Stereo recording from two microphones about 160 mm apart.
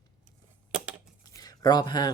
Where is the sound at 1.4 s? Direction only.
25° left (ahead or behind).